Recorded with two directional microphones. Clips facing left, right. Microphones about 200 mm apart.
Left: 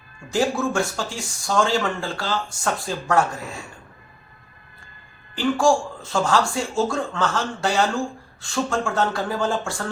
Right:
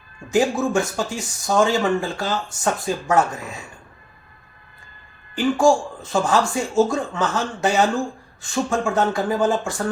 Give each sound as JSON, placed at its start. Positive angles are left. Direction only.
{"t": 0.3, "sound": "speech", "side_deg": -20}
{"t": 5.4, "sound": "speech", "side_deg": -20}